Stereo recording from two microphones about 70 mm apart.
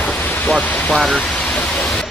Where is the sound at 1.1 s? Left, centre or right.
Centre.